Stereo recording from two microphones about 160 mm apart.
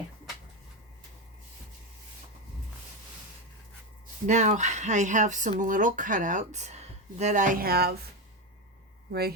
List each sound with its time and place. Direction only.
4.3 s speech: 50° right (ahead or behind); by 7.9 s 75° right (ahead or behind)